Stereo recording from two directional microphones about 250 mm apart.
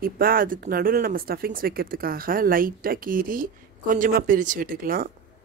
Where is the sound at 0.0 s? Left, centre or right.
Right.